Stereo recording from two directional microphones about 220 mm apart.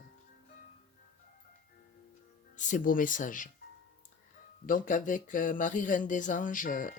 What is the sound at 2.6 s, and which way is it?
Speech, 35° left (ahead or behind).